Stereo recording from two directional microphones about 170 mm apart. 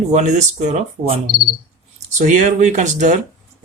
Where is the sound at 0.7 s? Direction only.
35° right (ahead or behind).